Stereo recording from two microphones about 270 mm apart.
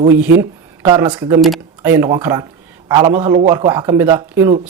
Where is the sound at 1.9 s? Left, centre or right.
Centre.